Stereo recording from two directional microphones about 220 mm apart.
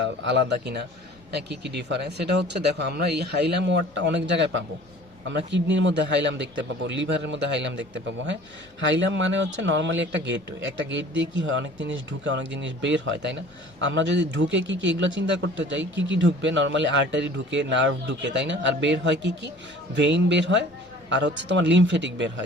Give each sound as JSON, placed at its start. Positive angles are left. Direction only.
{"t": 0.0, "sound": "a man's voice", "side_deg": -55}